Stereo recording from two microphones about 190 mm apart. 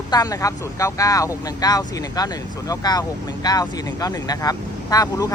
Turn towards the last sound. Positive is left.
turn(degrees=20)  # may be behind; listen again after turning